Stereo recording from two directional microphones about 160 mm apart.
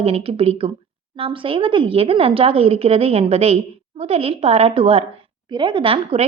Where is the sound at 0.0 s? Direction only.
35° right (ahead or behind).